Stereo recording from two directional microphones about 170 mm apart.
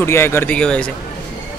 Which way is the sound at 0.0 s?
15° left (ahead or behind).